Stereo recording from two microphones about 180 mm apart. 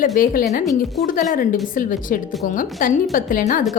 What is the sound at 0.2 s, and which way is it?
A woman's voice, 50° left (ahead or behind).